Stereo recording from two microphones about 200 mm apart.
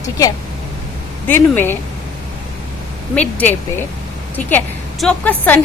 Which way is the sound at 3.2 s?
10° left (ahead or behind).